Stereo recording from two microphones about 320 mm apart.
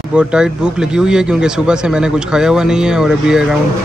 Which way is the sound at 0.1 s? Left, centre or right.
Centre.